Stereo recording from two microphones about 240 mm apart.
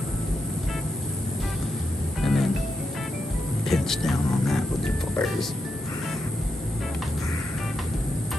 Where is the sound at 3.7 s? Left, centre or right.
Centre.